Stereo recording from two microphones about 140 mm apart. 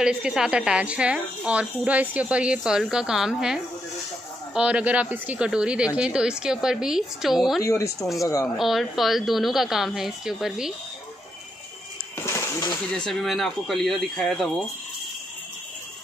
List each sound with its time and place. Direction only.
0.0 s a woman's voice: 5° right (ahead or behind)
7.6 s speech: 20° left (ahead or behind)
8.5 s a woman's voice: centre (ahead or behind)
12.2 s a sound: 20° left (ahead or behind)
12.9 s a woman's voice: 5° left (ahead or behind)